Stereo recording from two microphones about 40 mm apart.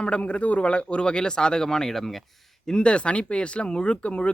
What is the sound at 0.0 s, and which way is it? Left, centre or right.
Speech, left.